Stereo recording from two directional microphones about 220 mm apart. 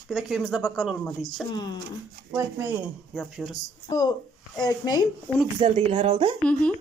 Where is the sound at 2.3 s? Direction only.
10° right (ahead or behind).